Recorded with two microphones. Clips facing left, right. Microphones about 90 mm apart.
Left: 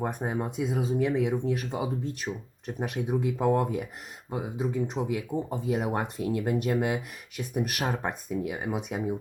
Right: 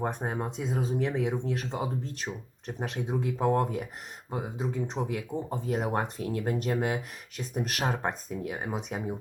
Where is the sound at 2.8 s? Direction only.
10° left (ahead or behind).